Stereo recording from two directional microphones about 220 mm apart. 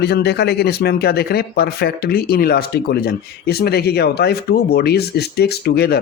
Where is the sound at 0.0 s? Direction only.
50° left (ahead or behind).